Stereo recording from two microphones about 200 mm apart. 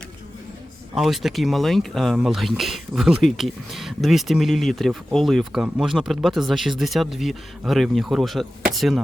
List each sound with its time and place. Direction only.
0.9 s speech: centre (ahead or behind)